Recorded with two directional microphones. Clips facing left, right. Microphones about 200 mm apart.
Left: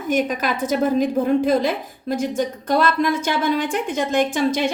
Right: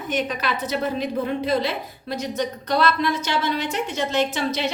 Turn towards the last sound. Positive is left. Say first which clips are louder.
# left 4 dB
turn(degrees=50)  # may be behind; listen again after turning